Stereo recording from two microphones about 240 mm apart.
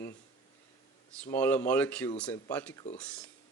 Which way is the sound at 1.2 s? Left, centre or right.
Centre.